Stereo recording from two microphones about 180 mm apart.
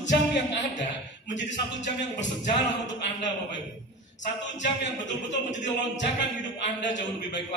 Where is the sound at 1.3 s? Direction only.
80° left.